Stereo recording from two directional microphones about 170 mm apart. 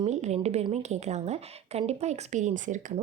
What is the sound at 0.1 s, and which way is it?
A woman's voice, 40° right (ahead or behind).